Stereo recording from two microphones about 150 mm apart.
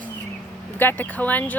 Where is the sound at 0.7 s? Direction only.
15° left (ahead or behind).